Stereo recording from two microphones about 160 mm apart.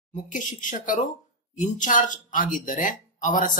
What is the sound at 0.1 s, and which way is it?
Speech, 55° left (ahead or behind).